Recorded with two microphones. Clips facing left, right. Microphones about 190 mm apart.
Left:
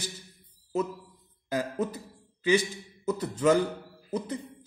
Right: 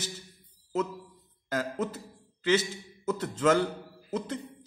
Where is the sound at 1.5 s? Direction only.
15° left (ahead or behind).